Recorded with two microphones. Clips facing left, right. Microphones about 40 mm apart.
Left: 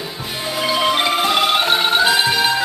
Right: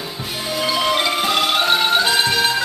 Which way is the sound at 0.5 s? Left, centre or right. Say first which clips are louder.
Left 1 dB; centre.